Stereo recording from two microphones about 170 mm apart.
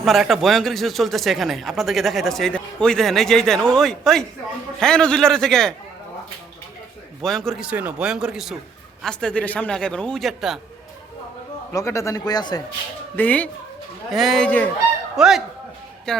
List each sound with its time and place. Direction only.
0.0 s speech: centre (ahead or behind)
7.2 s speech: centre (ahead or behind)
11.7 s a man's voice: 20° left (ahead or behind)
13.1 s speech: 10° left (ahead or behind)
14.1 s speech: centre (ahead or behind)